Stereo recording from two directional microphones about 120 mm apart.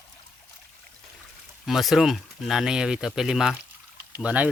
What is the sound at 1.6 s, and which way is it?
Speech, centre (ahead or behind).